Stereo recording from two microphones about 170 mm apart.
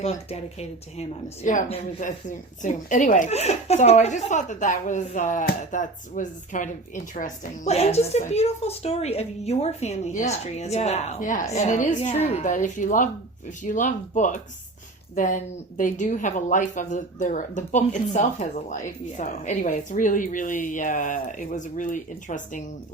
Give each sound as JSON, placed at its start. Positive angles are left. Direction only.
{"t": 1.5, "sound": "a woman's voice", "side_deg": 50}